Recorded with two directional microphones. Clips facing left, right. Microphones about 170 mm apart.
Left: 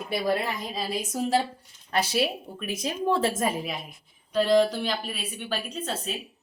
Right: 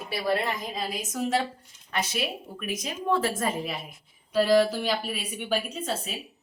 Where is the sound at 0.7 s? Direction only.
30° left (ahead or behind).